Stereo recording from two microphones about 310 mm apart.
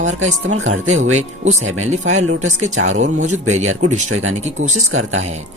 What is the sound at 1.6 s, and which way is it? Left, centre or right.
Speech, right.